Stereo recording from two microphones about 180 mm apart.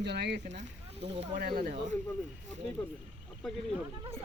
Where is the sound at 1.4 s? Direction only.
55° right (ahead or behind).